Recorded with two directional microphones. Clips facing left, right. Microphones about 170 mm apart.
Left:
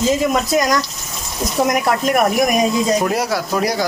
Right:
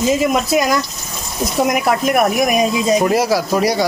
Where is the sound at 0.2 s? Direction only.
10° right (ahead or behind).